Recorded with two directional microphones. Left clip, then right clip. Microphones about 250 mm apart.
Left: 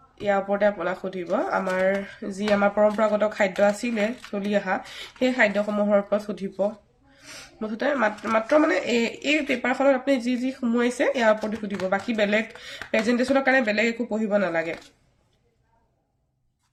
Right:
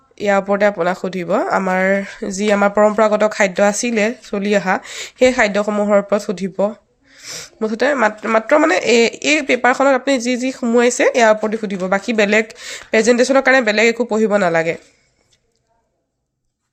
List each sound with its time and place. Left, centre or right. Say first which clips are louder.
0.2 s speech: right 8 dB; right